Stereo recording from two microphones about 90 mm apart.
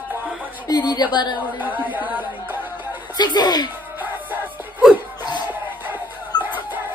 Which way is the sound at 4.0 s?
20° right (ahead or behind).